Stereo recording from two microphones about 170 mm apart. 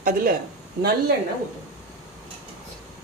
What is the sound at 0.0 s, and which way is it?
Speech, 55° right (ahead or behind).